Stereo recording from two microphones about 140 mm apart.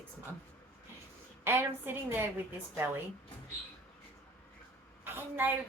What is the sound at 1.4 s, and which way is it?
Speech, 15° right (ahead or behind).